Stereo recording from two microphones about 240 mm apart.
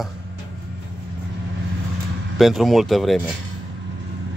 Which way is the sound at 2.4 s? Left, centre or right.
Centre.